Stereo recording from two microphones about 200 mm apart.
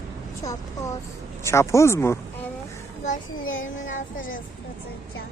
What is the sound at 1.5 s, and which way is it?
Speech, 15° left (ahead or behind).